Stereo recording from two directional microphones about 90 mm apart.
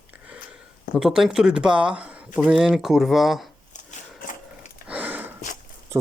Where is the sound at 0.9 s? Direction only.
5° right (ahead or behind).